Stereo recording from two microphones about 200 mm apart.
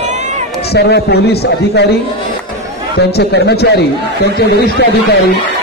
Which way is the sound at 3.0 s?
55° left (ahead or behind).